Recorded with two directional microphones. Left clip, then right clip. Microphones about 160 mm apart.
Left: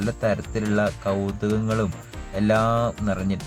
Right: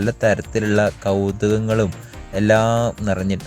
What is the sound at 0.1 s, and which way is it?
Speech, 25° right (ahead or behind).